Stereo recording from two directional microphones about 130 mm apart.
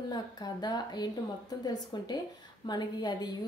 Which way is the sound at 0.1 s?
35° left (ahead or behind).